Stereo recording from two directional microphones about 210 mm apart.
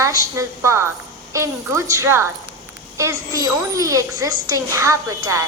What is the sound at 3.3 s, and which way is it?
A woman's voice, 15° right (ahead or behind).